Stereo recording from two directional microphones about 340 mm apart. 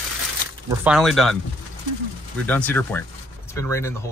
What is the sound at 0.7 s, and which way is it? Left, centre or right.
Speech, centre.